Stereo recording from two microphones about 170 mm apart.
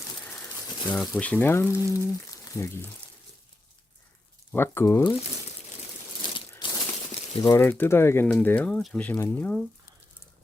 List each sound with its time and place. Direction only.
0.9 s speech: 5° left (ahead or behind)
4.5 s speech: 15° left (ahead or behind)
6.2 s a sound: 25° left (ahead or behind)
7.4 s speech: 15° left (ahead or behind)